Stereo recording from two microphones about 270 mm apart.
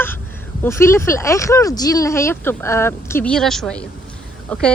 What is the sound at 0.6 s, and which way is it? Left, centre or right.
Speech, centre.